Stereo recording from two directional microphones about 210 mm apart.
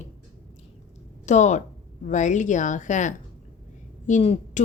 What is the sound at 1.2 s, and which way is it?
A woman's voice, 35° left (ahead or behind).